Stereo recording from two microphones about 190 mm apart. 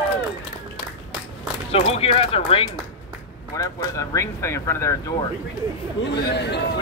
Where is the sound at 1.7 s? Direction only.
30° left (ahead or behind).